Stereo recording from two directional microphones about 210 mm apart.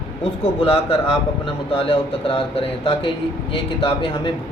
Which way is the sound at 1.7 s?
25° left (ahead or behind).